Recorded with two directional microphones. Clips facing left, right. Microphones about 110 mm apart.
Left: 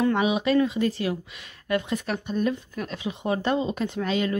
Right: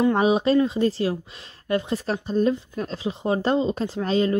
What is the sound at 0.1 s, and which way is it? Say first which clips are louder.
A woman's voice: right 3 dB; 35° right (ahead or behind).